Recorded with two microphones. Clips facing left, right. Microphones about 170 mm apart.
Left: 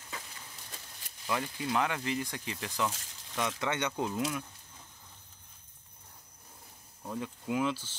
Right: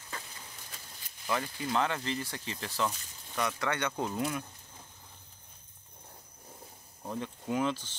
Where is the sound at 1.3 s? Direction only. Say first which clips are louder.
Even; 15° left (ahead or behind).